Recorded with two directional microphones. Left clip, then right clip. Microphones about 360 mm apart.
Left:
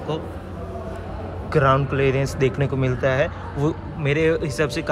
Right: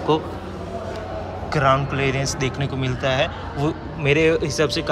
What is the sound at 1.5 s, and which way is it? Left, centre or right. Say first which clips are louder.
Speech: even; centre.